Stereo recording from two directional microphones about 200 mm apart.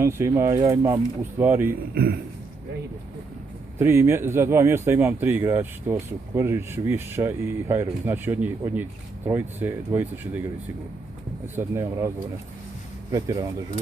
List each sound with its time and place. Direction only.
0.0 s speech: 15° right (ahead or behind)
3.7 s speech: 10° right (ahead or behind)
11.5 s speech: 15° right (ahead or behind)
13.1 s speech: 20° right (ahead or behind)